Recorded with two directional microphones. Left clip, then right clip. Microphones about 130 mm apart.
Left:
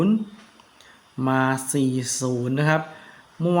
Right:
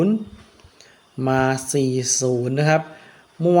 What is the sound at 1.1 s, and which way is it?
A man's voice, 40° right (ahead or behind).